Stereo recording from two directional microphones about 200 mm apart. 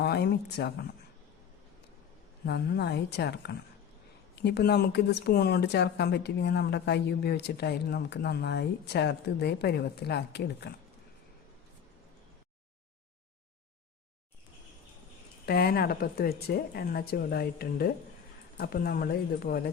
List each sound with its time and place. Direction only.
0.0 s speech: 55° left (ahead or behind)
2.5 s speech: 55° left (ahead or behind)
15.4 s a woman's voice: 50° left (ahead or behind)